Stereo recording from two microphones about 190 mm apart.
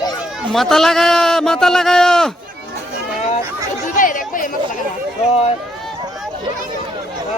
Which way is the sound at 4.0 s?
45° left (ahead or behind).